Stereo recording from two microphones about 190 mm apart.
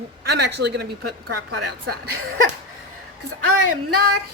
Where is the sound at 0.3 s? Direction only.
60° right (ahead or behind).